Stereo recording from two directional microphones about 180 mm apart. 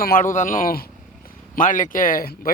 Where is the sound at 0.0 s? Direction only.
50° left (ahead or behind).